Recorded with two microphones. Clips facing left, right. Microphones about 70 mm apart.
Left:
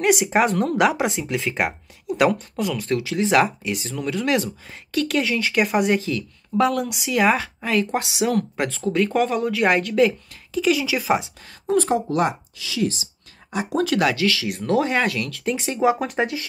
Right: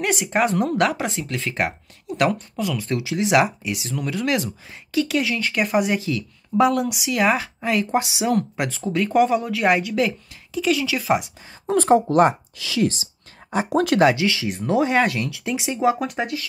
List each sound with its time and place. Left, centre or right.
0.3 s speech: centre
11.7 s speech: right
13.9 s speech: right
15.8 s speech: centre